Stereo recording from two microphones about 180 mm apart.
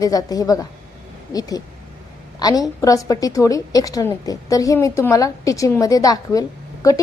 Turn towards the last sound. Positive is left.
turn(degrees=20)  # may be behind; listen again after turning